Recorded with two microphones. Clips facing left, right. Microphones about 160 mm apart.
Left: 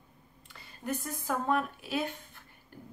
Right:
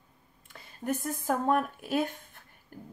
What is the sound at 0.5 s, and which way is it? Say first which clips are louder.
Speech: right 3 dB; 50° right (ahead or behind).